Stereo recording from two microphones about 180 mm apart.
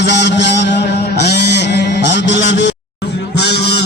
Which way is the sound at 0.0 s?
70° left (ahead or behind).